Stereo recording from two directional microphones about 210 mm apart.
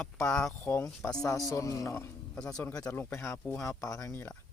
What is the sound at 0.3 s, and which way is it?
A man's voice, 5° left (ahead or behind).